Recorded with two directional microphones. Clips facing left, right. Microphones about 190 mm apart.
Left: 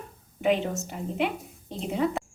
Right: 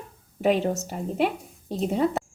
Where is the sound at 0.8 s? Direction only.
35° right (ahead or behind).